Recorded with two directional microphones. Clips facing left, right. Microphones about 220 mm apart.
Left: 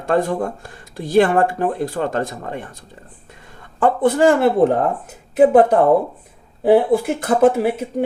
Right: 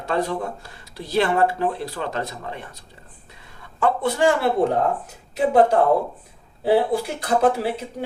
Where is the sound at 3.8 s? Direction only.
50° left (ahead or behind).